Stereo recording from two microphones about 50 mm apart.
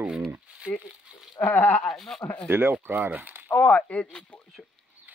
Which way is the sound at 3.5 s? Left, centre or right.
Left.